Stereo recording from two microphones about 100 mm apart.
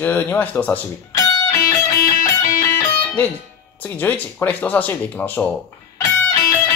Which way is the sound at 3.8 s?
20° left (ahead or behind).